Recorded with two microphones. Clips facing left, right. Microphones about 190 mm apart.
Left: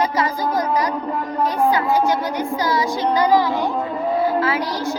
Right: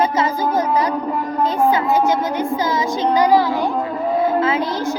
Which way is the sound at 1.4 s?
20° right (ahead or behind).